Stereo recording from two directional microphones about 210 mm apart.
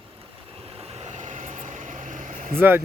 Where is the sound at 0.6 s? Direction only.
30° right (ahead or behind).